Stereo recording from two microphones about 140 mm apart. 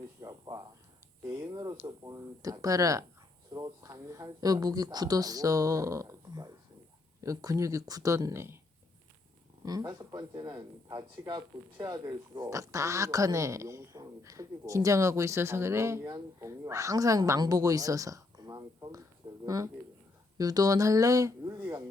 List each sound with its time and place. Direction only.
0.2 s a sound: 25° right (ahead or behind)
1.3 s speech: 25° right (ahead or behind)
9.6 s speech: 25° right (ahead or behind)